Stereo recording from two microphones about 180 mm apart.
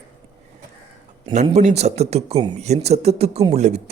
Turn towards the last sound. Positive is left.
turn(degrees=-35)  # may be behind; listen again after turning